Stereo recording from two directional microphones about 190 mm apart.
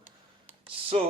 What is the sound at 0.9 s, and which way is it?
Speech, 35° right (ahead or behind).